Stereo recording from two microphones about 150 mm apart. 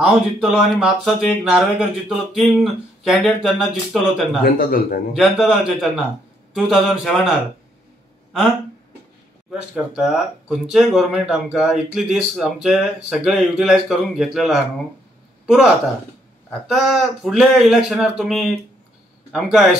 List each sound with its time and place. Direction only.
0.0 s speech: centre (ahead or behind)
4.6 s a man's voice: 75° left (ahead or behind)
5.1 s speech: centre (ahead or behind)
9.5 s speech: 5° right (ahead or behind)